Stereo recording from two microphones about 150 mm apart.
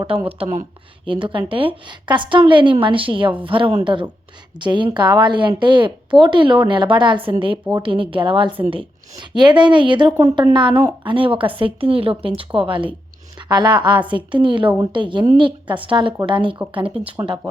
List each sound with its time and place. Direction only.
0.1 s a woman's voice: 40° right (ahead or behind)